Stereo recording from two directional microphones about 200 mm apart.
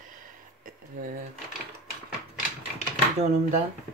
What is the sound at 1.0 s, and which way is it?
Speech, 40° right (ahead or behind).